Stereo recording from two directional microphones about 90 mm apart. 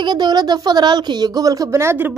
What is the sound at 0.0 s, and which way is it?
A woman's voice, 55° right (ahead or behind).